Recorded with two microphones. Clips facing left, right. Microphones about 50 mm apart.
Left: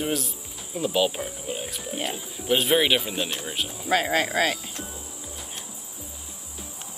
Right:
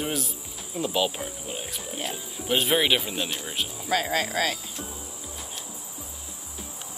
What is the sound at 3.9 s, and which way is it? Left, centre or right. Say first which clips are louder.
Speech: left 3 dB; left.